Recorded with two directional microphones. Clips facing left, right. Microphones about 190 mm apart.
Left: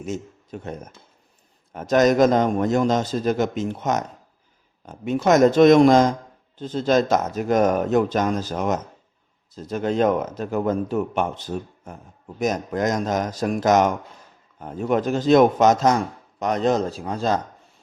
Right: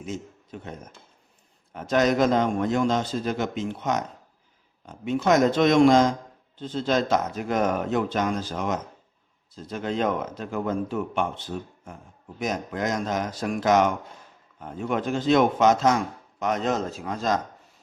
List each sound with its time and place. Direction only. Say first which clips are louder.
0.0 s speech: left 4 dB; 45° left (ahead or behind)
1.7 s speech: left 4 dB; 45° left (ahead or behind)